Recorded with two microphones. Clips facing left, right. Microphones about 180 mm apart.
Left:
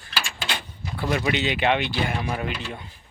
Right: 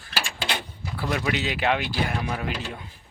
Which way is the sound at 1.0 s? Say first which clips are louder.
Left 2 dB; centre (ahead or behind).